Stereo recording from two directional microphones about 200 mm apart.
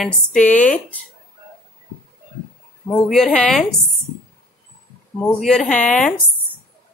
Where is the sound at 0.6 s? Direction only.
5° left (ahead or behind).